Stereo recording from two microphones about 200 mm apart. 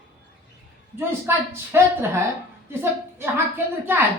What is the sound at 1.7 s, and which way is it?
Speech, 10° right (ahead or behind).